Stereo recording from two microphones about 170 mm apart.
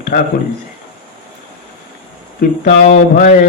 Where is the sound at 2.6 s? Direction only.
60° left (ahead or behind).